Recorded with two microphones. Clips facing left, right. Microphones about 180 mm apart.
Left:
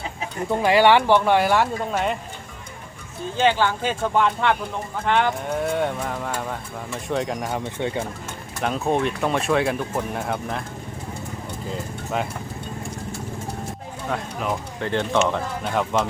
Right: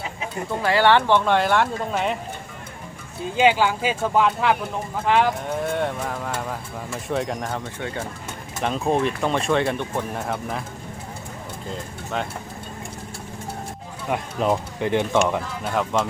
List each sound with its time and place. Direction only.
0.5 s speech: 15° left (ahead or behind); by 2.1 s centre (ahead or behind)
3.3 s speech: 10° right (ahead or behind)
7.5 s speech: 15° left (ahead or behind)
8.6 s speech: centre (ahead or behind)
11.7 s speech: 5° left (ahead or behind)
14.1 s speech: 15° right (ahead or behind)
15.7 s speech: centre (ahead or behind)